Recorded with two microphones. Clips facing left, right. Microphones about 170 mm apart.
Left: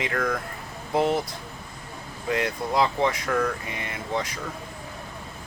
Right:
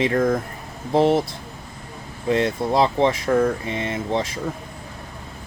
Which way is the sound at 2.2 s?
25° right (ahead or behind).